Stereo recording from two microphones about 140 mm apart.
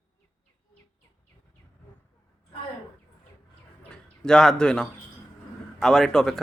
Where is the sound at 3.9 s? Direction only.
5° left (ahead or behind).